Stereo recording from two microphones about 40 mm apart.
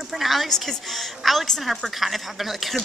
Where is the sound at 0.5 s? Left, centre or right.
Centre.